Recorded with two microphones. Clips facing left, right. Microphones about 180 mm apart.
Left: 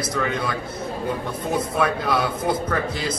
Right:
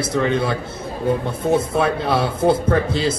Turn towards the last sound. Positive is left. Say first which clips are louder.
# right 6 dB
turn(degrees=-30)  # may be behind; listen again after turning